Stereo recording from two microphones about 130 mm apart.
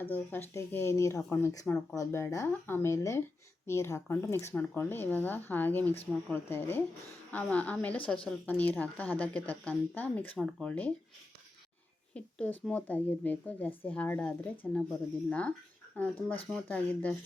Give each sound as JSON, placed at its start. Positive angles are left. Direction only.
{"t": 0.0, "sound": "a woman's voice", "side_deg": 15}
{"t": 2.0, "sound": "a woman's voice", "side_deg": 20}
{"t": 12.1, "sound": "a woman's voice", "side_deg": 10}
{"t": 16.6, "sound": "a woman's voice", "side_deg": 10}